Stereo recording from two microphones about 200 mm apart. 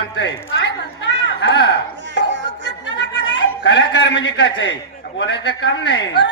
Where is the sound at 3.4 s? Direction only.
60° left (ahead or behind).